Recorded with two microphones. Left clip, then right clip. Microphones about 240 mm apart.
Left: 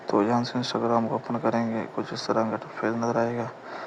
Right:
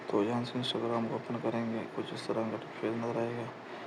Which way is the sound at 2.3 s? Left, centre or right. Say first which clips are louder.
Left 10 dB; left.